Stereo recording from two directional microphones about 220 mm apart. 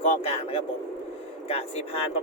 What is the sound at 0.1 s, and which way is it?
Speech, 25° left (ahead or behind).